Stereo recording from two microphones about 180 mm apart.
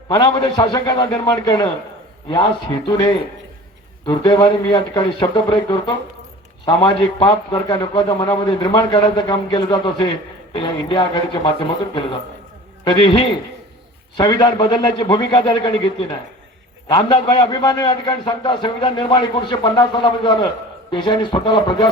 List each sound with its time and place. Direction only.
0.1 s a man's voice: 20° left (ahead or behind)
7.2 s a man's voice: 25° left (ahead or behind)
12.8 s a man's voice: 25° left (ahead or behind)